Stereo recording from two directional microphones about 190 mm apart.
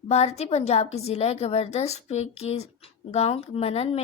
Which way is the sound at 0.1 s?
35° left (ahead or behind).